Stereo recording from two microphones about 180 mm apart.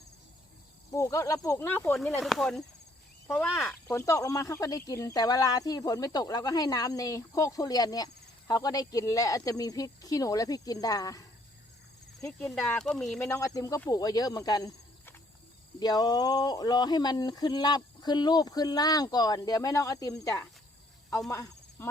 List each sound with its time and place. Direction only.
0.9 s speech: 20° left (ahead or behind)
3.8 s speech: 15° left (ahead or behind)
12.4 s speech: 5° left (ahead or behind)
13.1 s speech: 15° left (ahead or behind)
21.2 s cricket: 20° left (ahead or behind)